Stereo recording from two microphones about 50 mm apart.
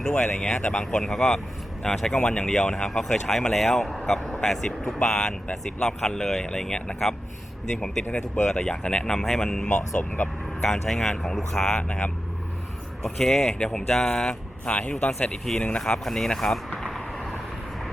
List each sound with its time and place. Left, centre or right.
0.2 s speech: centre
9.6 s speech: left
10.6 s speech: centre
11.8 s speech: left
13.0 s speech: centre
14.6 s speech: left
15.8 s speech: centre
16.8 s a sound: centre